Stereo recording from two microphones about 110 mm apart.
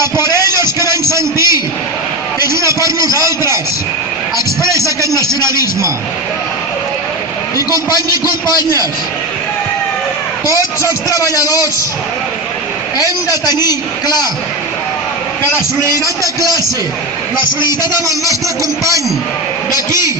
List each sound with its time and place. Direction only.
0.0 s a sound: 25° right (ahead or behind)
4.6 s music: 25° right (ahead or behind)
7.5 s a man's voice: 35° left (ahead or behind)
11.1 s a man's voice: 35° left (ahead or behind)
13.0 s a man's voice: 35° left (ahead or behind)
15.8 s a man's voice: 30° right (ahead or behind)
17.3 s a man's voice: 40° left (ahead or behind)
18.3 s a man's voice: 30° right (ahead or behind)